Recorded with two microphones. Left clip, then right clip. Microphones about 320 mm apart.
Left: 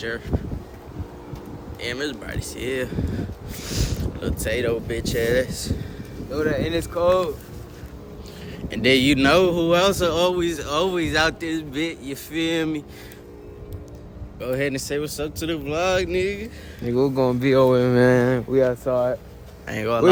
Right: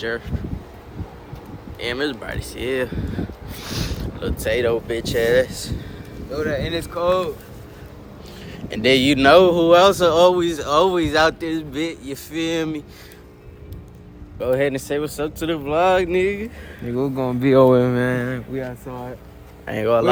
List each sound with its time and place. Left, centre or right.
1.8 s speech: centre
6.3 s speech: centre
8.4 s speech: centre
14.3 s speech: centre
16.8 s speech: centre
19.6 s speech: centre